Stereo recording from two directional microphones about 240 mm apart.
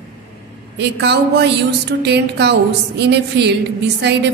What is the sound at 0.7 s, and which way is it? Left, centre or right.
A woman's voice, right.